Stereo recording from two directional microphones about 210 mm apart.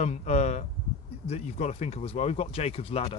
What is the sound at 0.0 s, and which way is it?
Speech, 35° left (ahead or behind).